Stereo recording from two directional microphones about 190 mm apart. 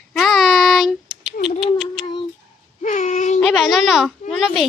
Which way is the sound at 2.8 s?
40° left (ahead or behind).